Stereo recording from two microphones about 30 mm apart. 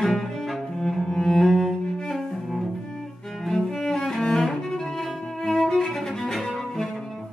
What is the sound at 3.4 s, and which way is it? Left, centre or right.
Cello, centre.